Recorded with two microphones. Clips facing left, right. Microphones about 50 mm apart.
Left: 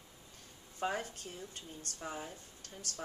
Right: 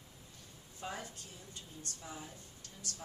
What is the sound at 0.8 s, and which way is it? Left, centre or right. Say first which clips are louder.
A woman's voice: left 7 dB; left.